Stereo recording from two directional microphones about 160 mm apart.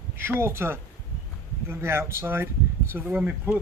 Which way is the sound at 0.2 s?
15° right (ahead or behind).